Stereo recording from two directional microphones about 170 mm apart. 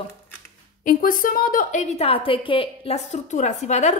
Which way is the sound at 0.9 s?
55° left (ahead or behind).